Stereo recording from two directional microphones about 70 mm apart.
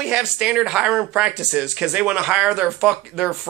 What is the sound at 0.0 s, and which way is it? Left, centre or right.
Speech, centre.